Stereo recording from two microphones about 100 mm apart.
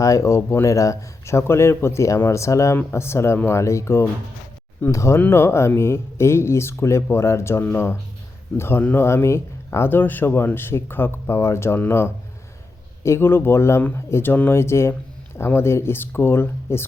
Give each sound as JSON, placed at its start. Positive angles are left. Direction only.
{"t": 0.0, "sound": "speech", "side_deg": 35}